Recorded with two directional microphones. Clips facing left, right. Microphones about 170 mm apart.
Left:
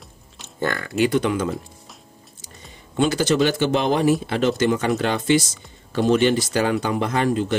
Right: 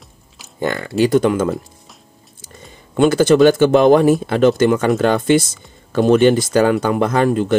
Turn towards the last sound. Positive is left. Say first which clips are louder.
# right 5 dB
turn(degrees=-50)  # may be behind; listen again after turning